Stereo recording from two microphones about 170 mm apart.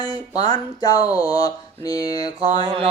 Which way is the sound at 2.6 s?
35° right (ahead or behind).